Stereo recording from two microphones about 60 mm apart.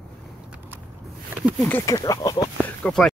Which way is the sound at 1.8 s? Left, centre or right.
Left.